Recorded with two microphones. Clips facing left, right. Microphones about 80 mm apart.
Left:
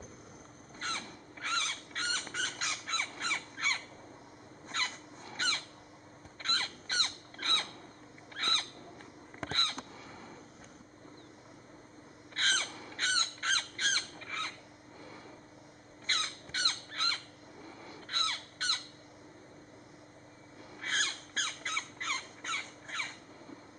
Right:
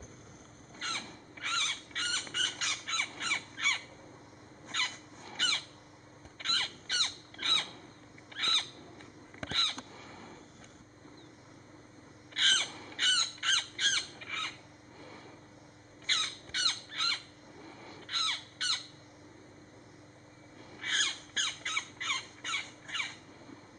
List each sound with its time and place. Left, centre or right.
0.7 s a sound: centre
8.4 s owl: centre
9.5 s a sound: centre
12.4 s crow: centre
16.1 s squawk: centre
18.0 s crow: centre
20.8 s squawk: centre